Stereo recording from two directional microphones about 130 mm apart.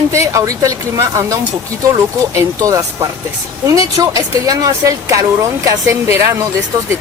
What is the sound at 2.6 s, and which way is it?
Speech, 25° right (ahead or behind).